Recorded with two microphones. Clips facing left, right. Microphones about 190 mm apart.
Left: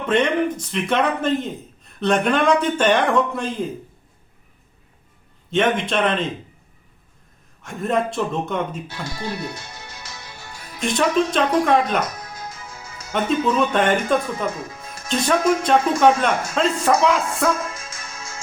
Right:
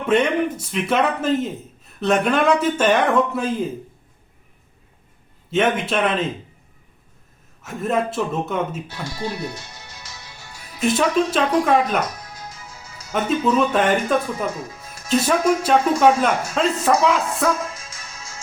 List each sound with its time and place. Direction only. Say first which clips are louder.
0.0 s speech: right 1 dB; 5° right (ahead or behind)
5.5 s speech: even; 5° right (ahead or behind)
7.6 s speech: even; 5° right (ahead or behind)
9.0 s speech: right 3 dB; 55° left (ahead or behind)
9.4 s music: right 1 dB; 55° left (ahead or behind)
10.8 s speech: right 1 dB; 5° right (ahead or behind)
12.2 s music: left 3 dB; 50° left (ahead or behind)
13.1 s speech: right 1 dB; centre (ahead or behind)
14.5 s speech: even; 50° left (ahead or behind)
15.1 s speech: right 1 dB; 5° right (ahead or behind)
17.7 s music: left 3 dB; 50° left (ahead or behind)